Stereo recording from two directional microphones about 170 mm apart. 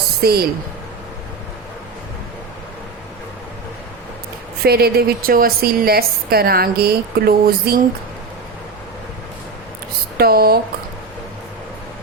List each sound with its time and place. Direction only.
0.2 s a woman's voice: 65° right (ahead or behind)
4.6 s a woman's voice: 65° right (ahead or behind)
10.2 s a woman's voice: 65° right (ahead or behind)